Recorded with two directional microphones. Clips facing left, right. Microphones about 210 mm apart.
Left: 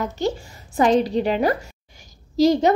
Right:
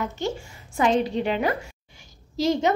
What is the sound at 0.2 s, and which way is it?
A woman's voice, 35° left (ahead or behind).